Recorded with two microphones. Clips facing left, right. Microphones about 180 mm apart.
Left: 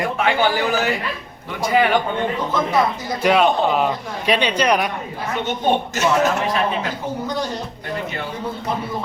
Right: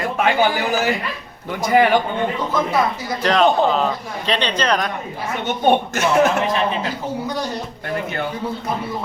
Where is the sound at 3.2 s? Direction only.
10° left (ahead or behind).